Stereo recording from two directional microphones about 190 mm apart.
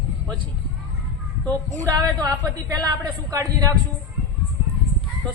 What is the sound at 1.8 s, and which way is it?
A woman's voice, 20° right (ahead or behind).